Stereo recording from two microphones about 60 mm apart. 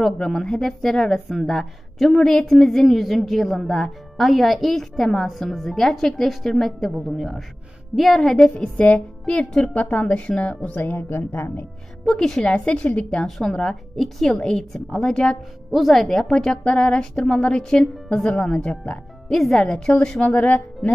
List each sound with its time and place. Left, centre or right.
0.0 s a woman's voice: centre
8.7 s a woman's voice: left
12.1 s a woman's voice: centre
12.4 s a woman's voice: centre
15.7 s a woman's voice: centre
19.3 s a woman's voice: centre; by 20.9 s left